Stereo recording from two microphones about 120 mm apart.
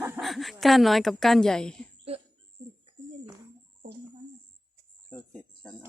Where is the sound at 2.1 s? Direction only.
60° right (ahead or behind).